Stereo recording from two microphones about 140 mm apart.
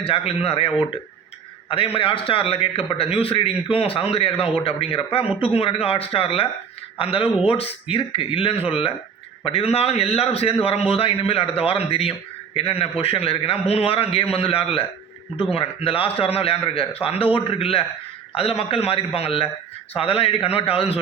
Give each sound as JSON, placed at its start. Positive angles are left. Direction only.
{"t": 0.0, "sound": "a man's voice", "side_deg": 45}